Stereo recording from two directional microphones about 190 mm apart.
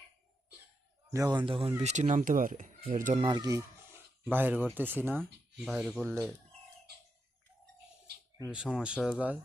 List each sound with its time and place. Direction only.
1.1 s speech: 20° right (ahead or behind)
1.8 s speech: 40° right (ahead or behind)
3.2 s speech: 20° right (ahead or behind); by 6.3 s 5° right (ahead or behind)
8.4 s speech: 5° right (ahead or behind)